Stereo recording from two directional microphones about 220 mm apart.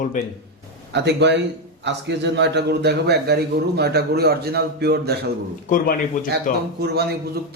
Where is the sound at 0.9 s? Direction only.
50° right (ahead or behind).